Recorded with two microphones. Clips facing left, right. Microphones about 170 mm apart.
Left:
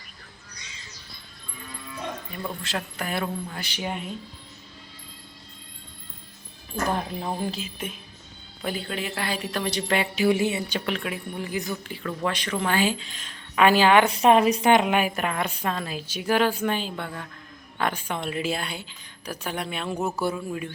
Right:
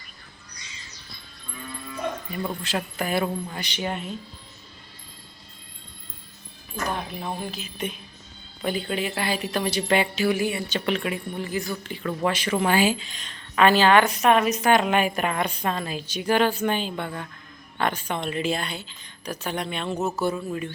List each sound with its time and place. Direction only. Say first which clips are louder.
2.3 s a woman's voice: right 3 dB; 5° right (ahead or behind)
7.8 s a woman's voice: right 4 dB; 5° left (ahead or behind)
10.2 s speech: left 2 dB; 20° left (ahead or behind)
10.7 s a woman's voice: right 3 dB; centre (ahead or behind)
11.4 s a woman's voice: left 1 dB; 15° left (ahead or behind)
12.0 s a woman's voice: right 3 dB; 5° right (ahead or behind); by 14.1 s 15° left (ahead or behind)
14.1 s a woman's voice: left 2 dB; 30° left (ahead or behind); by 20.7 s 5° left (ahead or behind)